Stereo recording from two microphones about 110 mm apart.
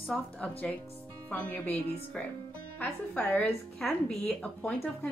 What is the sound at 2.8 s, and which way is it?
A woman's voice, 15° left (ahead or behind).